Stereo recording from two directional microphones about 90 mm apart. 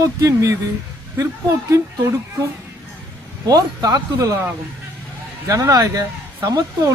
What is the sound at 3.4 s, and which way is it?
Speech, 45° right (ahead or behind).